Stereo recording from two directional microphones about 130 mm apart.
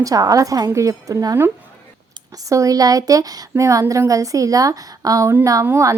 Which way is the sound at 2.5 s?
25° right (ahead or behind).